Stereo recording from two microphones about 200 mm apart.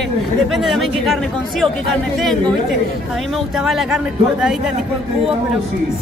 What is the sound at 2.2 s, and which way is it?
Speech, centre (ahead or behind).